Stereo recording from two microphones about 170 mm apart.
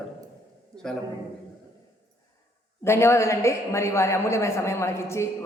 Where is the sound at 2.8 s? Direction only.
15° left (ahead or behind).